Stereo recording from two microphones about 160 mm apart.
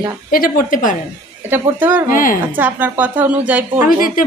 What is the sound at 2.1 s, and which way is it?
Speech, 60° left (ahead or behind).